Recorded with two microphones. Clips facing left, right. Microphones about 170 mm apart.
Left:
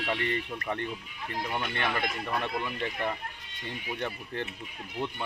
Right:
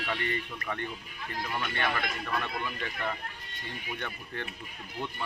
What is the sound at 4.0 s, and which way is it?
Speech, 30° left (ahead or behind).